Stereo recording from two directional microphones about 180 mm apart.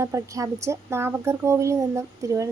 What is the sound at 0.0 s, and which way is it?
A woman's voice, 15° right (ahead or behind).